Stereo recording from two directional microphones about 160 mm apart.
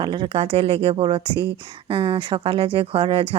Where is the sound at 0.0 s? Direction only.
30° right (ahead or behind).